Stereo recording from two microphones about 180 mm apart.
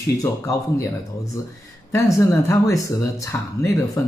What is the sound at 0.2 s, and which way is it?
Speech, 20° left (ahead or behind).